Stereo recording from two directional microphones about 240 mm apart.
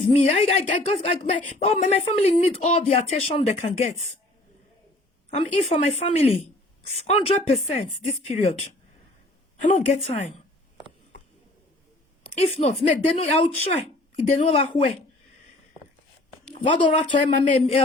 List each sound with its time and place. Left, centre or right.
0.0 s speech: left
5.4 s speech: left
12.2 s speech: left
16.7 s speech: left